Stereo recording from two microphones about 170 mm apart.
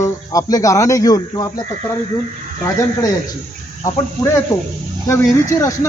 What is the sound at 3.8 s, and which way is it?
Speech, 15° left (ahead or behind).